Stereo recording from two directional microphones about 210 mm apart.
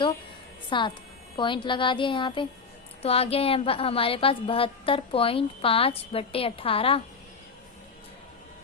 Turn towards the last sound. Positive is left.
turn(degrees=25)  # may be behind; listen again after turning